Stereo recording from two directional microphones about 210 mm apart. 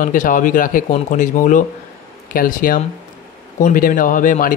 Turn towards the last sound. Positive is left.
turn(degrees=40)  # may be behind; listen again after turning